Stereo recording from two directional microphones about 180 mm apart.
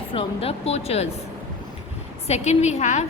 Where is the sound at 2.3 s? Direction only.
40° left (ahead or behind).